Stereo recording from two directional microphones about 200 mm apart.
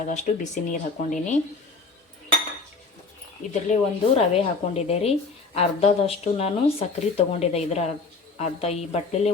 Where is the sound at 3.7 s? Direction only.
35° left (ahead or behind).